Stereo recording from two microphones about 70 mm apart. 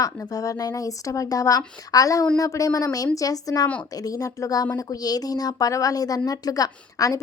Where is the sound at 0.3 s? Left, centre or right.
Left.